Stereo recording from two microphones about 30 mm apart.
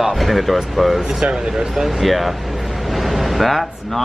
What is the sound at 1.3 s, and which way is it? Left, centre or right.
Speech, right.